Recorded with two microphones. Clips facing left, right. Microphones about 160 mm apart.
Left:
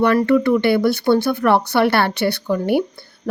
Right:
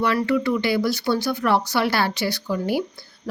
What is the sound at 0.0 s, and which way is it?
A woman's voice, 55° left (ahead or behind).